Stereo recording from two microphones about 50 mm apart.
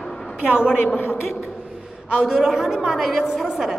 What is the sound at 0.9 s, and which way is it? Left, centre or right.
Speech, left.